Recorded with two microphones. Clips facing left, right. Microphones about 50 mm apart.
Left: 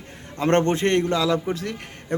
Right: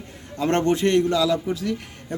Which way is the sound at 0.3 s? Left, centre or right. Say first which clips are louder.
Left 1 dB; left.